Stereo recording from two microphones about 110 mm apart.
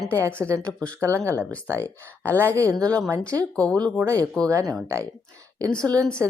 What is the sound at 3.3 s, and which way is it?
Speech, 35° right (ahead or behind).